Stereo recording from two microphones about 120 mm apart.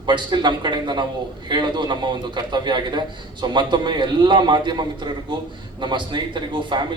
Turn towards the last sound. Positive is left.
turn(degrees=-40)  # may be behind; listen again after turning